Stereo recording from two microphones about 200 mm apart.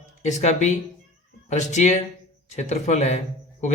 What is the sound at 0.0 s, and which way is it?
Speech, 35° left (ahead or behind).